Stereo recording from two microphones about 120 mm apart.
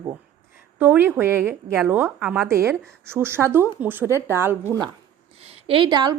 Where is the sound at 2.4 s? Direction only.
25° right (ahead or behind).